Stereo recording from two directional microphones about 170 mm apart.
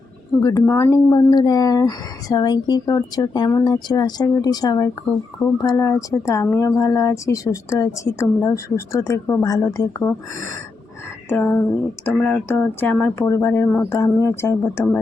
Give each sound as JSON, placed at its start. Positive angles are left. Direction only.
{"t": 0.3, "sound": "speech", "side_deg": 20}
{"t": 11.3, "sound": "speech", "side_deg": 10}